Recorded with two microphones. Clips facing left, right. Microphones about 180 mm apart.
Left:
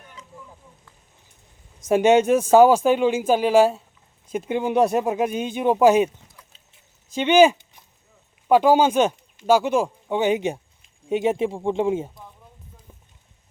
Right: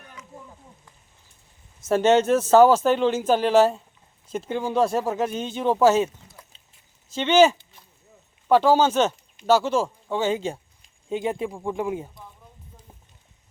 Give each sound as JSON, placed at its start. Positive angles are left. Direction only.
{"t": 1.8, "sound": "speech", "side_deg": 15}
{"t": 7.1, "sound": "speech", "side_deg": 15}